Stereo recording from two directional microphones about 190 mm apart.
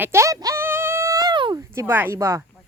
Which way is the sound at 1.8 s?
10° right (ahead or behind).